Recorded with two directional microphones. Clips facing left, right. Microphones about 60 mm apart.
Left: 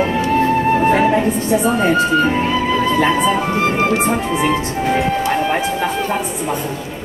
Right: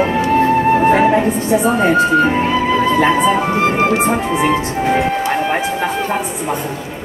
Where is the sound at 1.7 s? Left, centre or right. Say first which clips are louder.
Right 2 dB; right.